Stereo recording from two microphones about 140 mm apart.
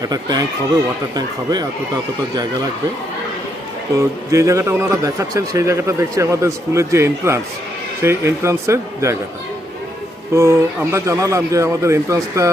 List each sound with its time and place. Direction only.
0.0 s a man's voice: 30° right (ahead or behind)
3.9 s a man's voice: 25° right (ahead or behind)
10.3 s a man's voice: 20° right (ahead or behind)